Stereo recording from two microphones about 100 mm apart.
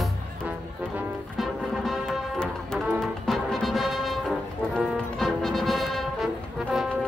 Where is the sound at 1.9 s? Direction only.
5° left (ahead or behind).